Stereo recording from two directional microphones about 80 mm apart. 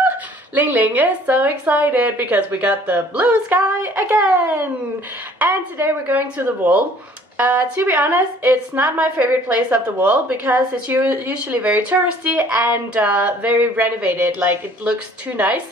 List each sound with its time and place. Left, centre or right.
0.6 s a woman's voice: right